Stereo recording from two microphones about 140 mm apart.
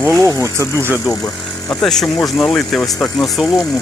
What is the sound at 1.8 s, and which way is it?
Speech, 5° left (ahead or behind).